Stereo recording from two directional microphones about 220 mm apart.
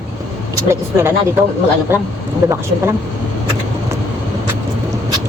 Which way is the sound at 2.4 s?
10° right (ahead or behind).